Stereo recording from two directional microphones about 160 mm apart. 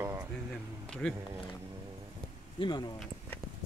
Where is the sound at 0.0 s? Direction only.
20° right (ahead or behind).